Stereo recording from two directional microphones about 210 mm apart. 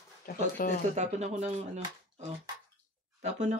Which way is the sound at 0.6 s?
40° left (ahead or behind).